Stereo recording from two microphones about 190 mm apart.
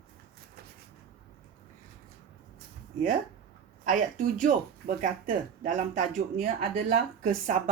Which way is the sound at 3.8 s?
40° right (ahead or behind).